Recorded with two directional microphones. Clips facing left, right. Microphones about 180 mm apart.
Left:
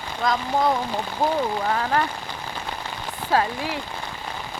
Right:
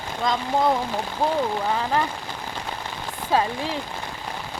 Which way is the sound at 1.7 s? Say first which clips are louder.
Left 2 dB; 10° right (ahead or behind).